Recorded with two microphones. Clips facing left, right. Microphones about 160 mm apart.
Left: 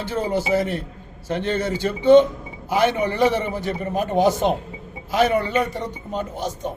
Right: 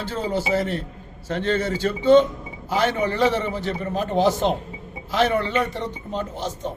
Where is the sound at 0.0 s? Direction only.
15° left (ahead or behind).